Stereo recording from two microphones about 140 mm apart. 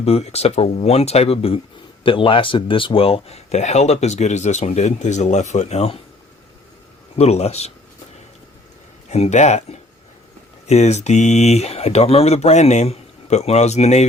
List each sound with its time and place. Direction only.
0.0 s speech: 50° left (ahead or behind)
7.2 s speech: 50° left (ahead or behind)
9.0 s speech: 55° left (ahead or behind)